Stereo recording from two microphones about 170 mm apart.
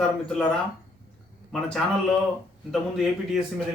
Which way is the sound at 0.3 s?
5° left (ahead or behind).